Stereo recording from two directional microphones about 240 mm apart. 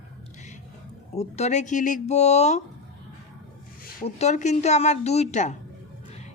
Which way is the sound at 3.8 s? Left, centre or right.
Left.